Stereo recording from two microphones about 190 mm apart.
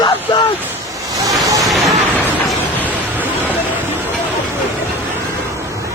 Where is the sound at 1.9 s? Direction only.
Centre (ahead or behind).